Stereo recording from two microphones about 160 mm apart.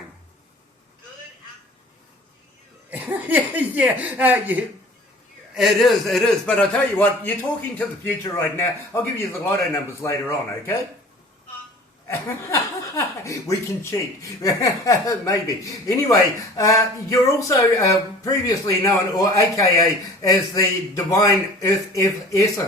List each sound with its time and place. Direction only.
2.9 s a man's voice: 10° right (ahead or behind); by 10.8 s 15° left (ahead or behind)
12.0 s speech: 20° left (ahead or behind)